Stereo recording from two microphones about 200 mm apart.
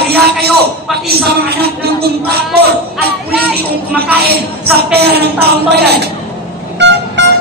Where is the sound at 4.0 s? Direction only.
50° right (ahead or behind).